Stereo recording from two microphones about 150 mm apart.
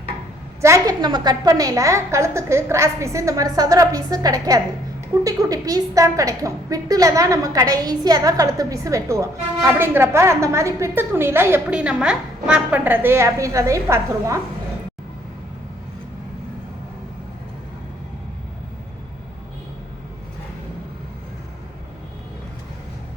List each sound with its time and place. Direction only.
0.6 s a woman's voice: 20° right (ahead or behind)